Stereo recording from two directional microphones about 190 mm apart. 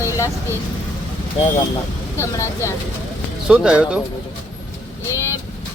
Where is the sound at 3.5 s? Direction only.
5° right (ahead or behind).